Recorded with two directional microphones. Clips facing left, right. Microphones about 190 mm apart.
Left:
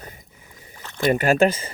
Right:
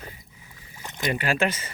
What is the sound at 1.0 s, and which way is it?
Speech, 45° left (ahead or behind).